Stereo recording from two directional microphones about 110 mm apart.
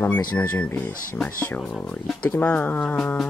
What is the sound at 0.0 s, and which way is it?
Speech, 15° left (ahead or behind).